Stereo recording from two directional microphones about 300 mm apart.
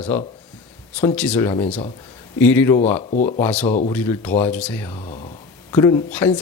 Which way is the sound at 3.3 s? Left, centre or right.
Centre.